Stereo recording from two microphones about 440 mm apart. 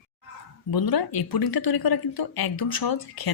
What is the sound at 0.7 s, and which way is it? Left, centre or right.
Speech, left.